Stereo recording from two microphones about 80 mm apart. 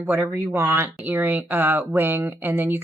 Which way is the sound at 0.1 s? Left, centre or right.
Right.